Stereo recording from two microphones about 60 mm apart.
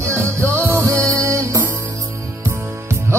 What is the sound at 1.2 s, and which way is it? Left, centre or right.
Music, right.